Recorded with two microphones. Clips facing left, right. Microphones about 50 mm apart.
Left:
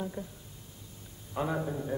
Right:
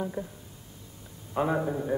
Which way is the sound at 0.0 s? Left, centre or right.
Centre.